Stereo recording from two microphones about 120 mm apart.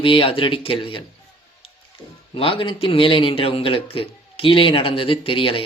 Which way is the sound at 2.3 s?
45° left (ahead or behind).